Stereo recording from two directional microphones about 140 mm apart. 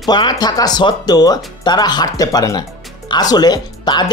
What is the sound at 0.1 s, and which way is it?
Speech, 30° left (ahead or behind).